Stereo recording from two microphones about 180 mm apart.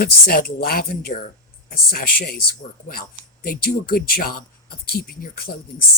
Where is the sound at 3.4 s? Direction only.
55° left (ahead or behind).